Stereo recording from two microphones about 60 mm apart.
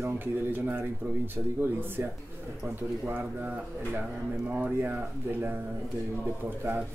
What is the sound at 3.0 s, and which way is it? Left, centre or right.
Speech, right.